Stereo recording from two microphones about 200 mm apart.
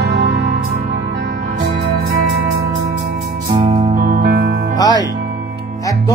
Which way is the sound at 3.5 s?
25° right (ahead or behind).